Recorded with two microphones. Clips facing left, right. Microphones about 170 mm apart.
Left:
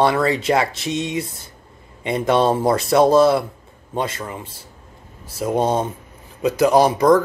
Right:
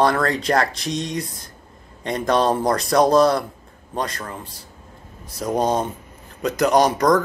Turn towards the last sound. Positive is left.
turn(degrees=5)  # may be behind; listen again after turning